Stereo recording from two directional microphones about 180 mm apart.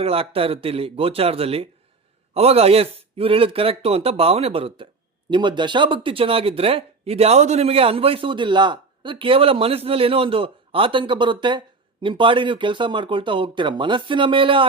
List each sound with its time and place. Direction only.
0.0 s speech: 30° right (ahead or behind)